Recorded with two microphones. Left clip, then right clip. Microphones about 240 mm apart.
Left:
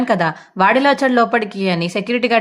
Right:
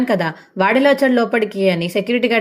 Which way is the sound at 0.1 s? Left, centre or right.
Centre.